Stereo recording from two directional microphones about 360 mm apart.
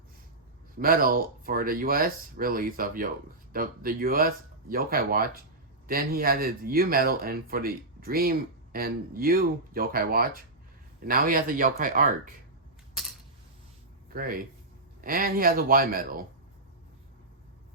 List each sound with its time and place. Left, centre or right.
0.8 s speech: right
14.1 s speech: right